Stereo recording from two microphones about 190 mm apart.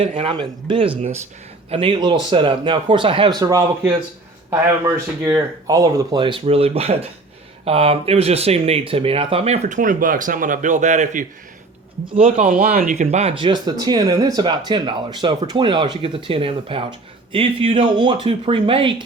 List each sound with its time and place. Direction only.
0.2 s speech: 25° right (ahead or behind)
5.2 s speech: 20° right (ahead or behind); by 11.3 s 40° right (ahead or behind)
12.0 s speech: 30° right (ahead or behind)
12.5 s speech: 50° right (ahead or behind); by 18.9 s 25° right (ahead or behind)